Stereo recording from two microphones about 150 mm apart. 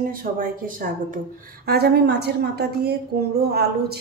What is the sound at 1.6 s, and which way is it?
A woman's voice, 90° right.